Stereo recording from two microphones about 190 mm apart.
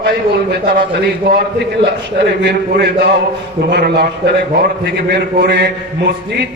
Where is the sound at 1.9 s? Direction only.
60° right (ahead or behind).